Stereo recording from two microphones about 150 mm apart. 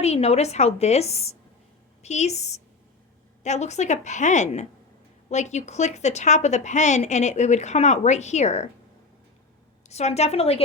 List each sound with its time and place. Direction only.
0.0 s a woman's voice: 45° left (ahead or behind)
9.9 s a woman's voice: 45° left (ahead or behind)